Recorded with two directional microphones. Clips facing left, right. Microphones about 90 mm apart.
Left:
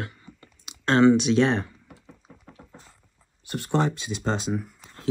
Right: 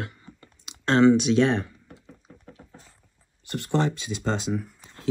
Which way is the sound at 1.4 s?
25° left (ahead or behind).